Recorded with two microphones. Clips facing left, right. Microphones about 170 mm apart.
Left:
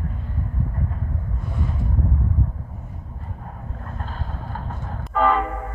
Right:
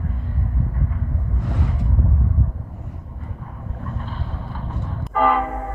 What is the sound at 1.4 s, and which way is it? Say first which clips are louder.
Vehicle: right 2 dB; 80° right.